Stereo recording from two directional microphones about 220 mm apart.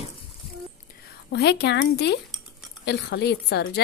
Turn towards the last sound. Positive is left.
turn(degrees=50)  # may be behind; listen again after turning